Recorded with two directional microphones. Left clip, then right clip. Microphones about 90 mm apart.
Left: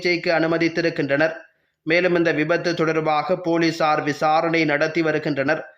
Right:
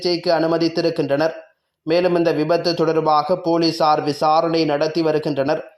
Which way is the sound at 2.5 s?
35° left (ahead or behind).